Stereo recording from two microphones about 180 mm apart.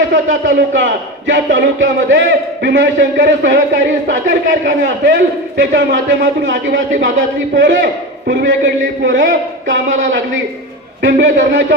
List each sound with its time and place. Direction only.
0.4 s a man's voice: 90° right
8.3 s a man's voice: 75° right (ahead or behind)